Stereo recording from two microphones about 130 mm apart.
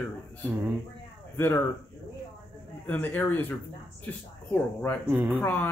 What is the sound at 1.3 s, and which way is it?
Speech, 20° left (ahead or behind).